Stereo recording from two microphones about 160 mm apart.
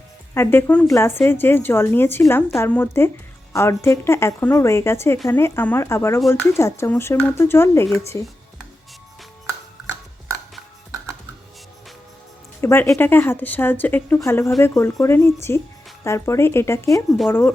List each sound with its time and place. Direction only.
0.3 s a woman's voice: 10° left (ahead or behind)
9.8 s a sound: 5° right (ahead or behind)
12.6 s a woman's voice: 20° left (ahead or behind)